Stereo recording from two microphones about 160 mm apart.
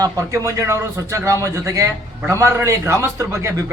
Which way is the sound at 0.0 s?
20° right (ahead or behind).